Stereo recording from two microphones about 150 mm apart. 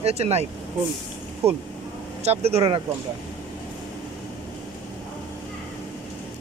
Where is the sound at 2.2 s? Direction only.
45° right (ahead or behind).